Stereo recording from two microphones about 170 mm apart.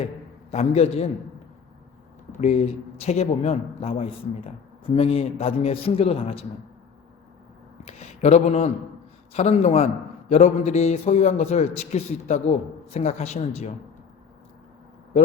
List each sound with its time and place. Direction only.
0.5 s a man's voice: 40° left (ahead or behind)
2.4 s a man's voice: 40° left (ahead or behind)
7.9 s a man's voice: 40° left (ahead or behind)